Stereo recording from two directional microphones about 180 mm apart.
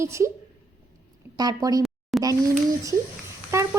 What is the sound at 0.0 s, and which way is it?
Speech, 15° right (ahead or behind).